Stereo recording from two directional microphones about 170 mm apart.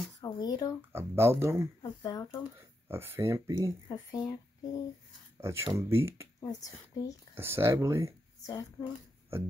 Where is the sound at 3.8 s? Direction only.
20° left (ahead or behind).